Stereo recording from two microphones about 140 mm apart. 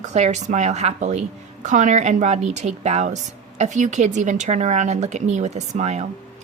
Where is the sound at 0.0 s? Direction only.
55° right (ahead or behind).